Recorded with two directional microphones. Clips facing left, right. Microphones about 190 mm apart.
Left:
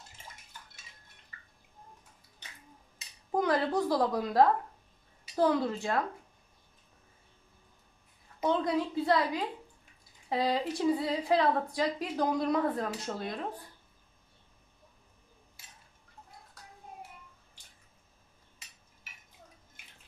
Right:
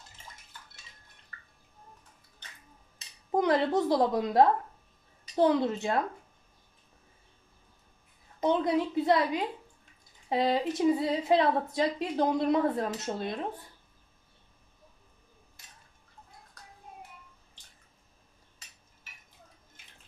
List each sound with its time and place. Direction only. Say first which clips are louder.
3.3 s a woman's voice: right 3 dB; 20° right (ahead or behind)
8.5 s a woman's voice: right 3 dB; 20° right (ahead or behind)